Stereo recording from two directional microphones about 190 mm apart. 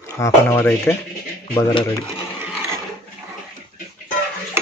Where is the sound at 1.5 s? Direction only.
25° left (ahead or behind).